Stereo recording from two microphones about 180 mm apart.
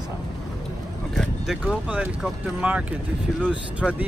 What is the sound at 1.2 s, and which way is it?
Speech, 5° left (ahead or behind).